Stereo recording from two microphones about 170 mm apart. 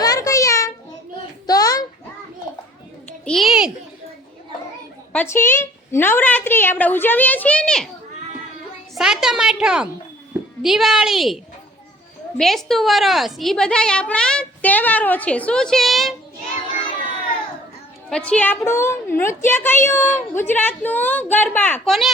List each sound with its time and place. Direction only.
0.0 s a sound: 20° left (ahead or behind)
3.2 s a sound: centre (ahead or behind)
5.1 s a woman's voice: 15° left (ahead or behind)
9.0 s a woman's voice: 5° right (ahead or behind)
12.4 s a woman's voice: centre (ahead or behind)
18.3 s a woman's voice: 10° left (ahead or behind)